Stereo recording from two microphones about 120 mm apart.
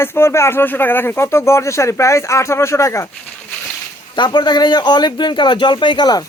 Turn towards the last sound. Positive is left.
turn(degrees=35)  # may be behind; listen again after turning